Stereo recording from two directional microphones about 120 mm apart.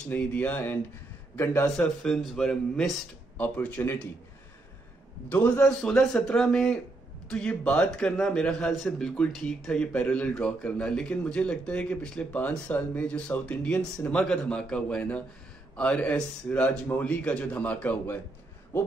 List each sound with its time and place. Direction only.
0.1 s a man's voice: 15° left (ahead or behind)
1.8 s a man's voice: 5° left (ahead or behind)
5.3 s a man's voice: 10° left (ahead or behind)